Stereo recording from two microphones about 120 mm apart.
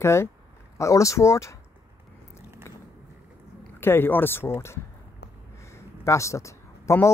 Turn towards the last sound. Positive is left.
turn(degrees=25)  # may be behind; listen again after turning